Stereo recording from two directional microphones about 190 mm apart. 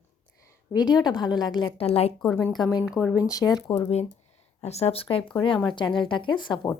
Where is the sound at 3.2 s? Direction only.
15° left (ahead or behind).